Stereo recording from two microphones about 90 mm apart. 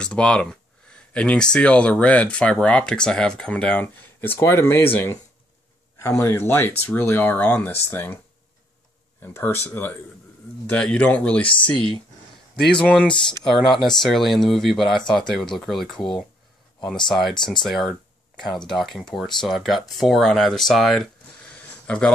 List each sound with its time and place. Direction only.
0.0 s speech: 10° left (ahead or behind)
9.2 s speech: 25° left (ahead or behind)
11.4 s speech: 70° left (ahead or behind)
12.7 s speech: 10° left (ahead or behind)
17.1 s speech: 5° left (ahead or behind)
21.5 s a sound: 15° left (ahead or behind)